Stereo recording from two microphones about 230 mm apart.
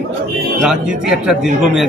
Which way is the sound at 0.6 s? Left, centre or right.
Centre.